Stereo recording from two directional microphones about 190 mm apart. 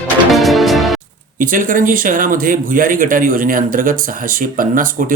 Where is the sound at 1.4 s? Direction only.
45° right (ahead or behind).